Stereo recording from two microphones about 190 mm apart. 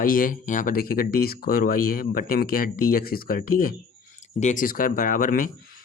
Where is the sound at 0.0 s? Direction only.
45° left (ahead or behind).